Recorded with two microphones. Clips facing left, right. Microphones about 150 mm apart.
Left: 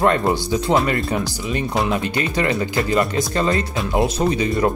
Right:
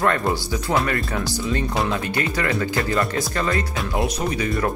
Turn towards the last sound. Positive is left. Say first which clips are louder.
# left 4 dB
turn(degrees=25)  # may be behind; listen again after turning